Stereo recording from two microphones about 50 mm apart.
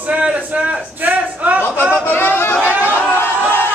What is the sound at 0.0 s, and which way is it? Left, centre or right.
Speech, right.